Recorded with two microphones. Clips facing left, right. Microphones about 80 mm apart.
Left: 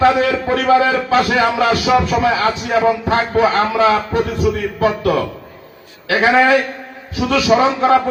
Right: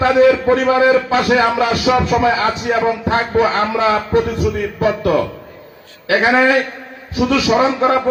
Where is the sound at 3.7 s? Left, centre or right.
Right.